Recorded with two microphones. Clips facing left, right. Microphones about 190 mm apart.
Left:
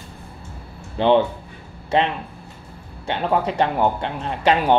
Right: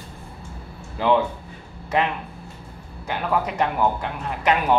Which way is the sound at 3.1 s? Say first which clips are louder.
Left 3 dB; 30° left (ahead or behind).